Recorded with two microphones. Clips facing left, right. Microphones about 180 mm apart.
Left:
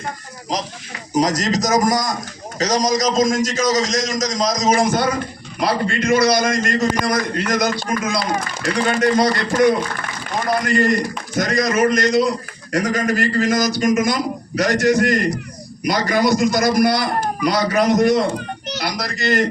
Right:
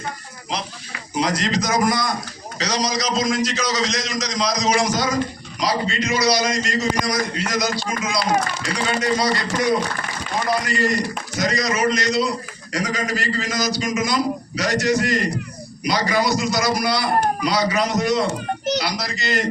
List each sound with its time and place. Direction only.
0.5 s a man's voice: 40° left (ahead or behind)